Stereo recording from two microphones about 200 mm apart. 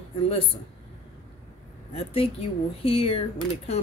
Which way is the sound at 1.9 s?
30° left (ahead or behind).